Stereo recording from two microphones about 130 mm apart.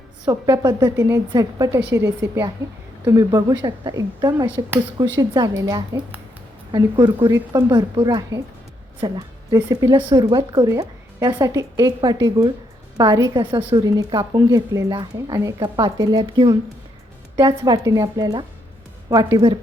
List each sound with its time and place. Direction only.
0.3 s a woman's voice: 30° right (ahead or behind)
4.4 s speech: 15° right (ahead or behind)
4.9 s a woman's voice: 30° right (ahead or behind)
9.0 s a sound: 30° right (ahead or behind)
10.2 s speech: 35° right (ahead or behind)
10.7 s a sound: 30° right (ahead or behind)
11.4 s speech: 30° right (ahead or behind)
17.8 s a woman's voice: 30° right (ahead or behind)